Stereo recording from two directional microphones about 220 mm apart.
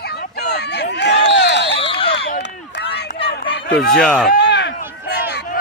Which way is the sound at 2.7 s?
50° left (ahead or behind).